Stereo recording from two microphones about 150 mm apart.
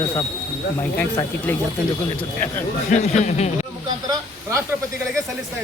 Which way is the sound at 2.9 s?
50° left (ahead or behind).